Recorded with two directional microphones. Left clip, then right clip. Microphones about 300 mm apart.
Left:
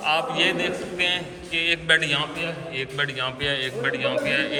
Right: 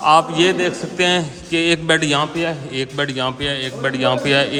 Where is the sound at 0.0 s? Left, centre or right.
Right.